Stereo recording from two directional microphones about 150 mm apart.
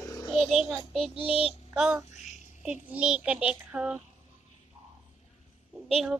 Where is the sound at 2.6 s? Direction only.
5° right (ahead or behind).